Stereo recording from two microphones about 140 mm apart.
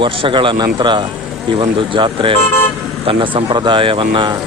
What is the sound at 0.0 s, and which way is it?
Speech, 40° right (ahead or behind).